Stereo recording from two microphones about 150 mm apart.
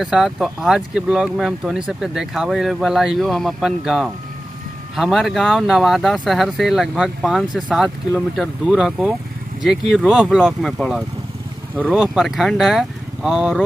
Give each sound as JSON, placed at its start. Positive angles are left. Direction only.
{"t": 0.0, "sound": "speech", "side_deg": -5}